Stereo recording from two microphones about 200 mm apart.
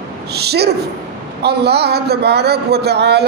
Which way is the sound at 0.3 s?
55° right (ahead or behind).